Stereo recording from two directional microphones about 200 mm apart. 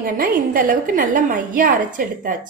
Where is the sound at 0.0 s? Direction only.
45° right (ahead or behind).